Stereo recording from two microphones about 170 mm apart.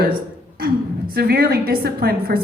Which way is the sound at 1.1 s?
65° right (ahead or behind).